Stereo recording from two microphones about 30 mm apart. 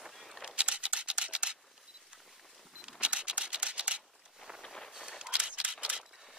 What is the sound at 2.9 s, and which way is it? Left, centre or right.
Scissors, right.